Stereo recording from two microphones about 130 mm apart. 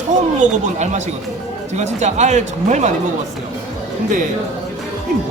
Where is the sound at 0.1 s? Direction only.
65° right (ahead or behind).